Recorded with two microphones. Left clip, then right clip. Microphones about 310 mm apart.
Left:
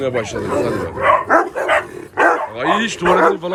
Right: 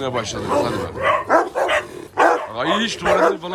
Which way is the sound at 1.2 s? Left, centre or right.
Centre.